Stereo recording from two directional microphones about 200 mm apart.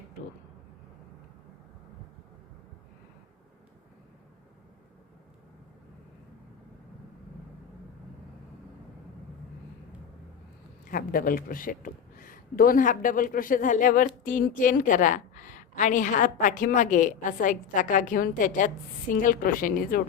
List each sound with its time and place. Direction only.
10.8 s a woman's voice: 45° left (ahead or behind)